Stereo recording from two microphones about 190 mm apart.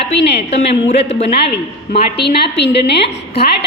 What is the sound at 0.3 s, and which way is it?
A man's voice, 35° left (ahead or behind).